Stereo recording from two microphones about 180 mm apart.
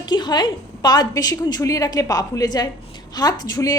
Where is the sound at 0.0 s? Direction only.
25° left (ahead or behind).